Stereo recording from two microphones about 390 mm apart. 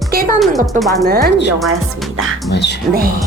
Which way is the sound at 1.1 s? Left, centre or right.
Right.